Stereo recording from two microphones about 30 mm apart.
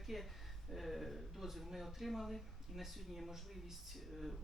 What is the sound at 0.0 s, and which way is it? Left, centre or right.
Speech, centre.